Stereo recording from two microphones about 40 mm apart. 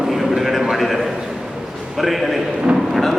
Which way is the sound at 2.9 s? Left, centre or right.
Centre.